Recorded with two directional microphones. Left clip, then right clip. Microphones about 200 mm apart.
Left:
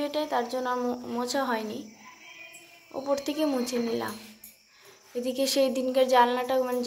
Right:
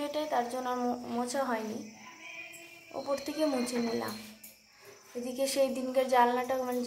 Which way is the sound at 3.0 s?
15° left (ahead or behind).